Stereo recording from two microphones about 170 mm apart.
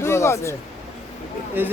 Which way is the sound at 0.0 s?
15° left (ahead or behind).